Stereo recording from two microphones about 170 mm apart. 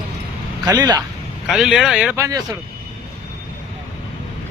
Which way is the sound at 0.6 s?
25° right (ahead or behind).